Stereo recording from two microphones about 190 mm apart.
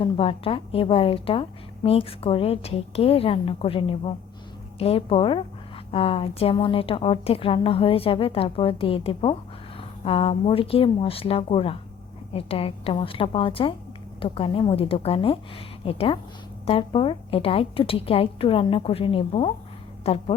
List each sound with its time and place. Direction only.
0.0 s a woman's voice: 30° left (ahead or behind)